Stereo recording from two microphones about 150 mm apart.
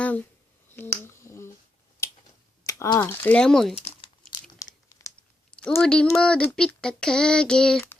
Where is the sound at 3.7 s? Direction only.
40° left (ahead or behind).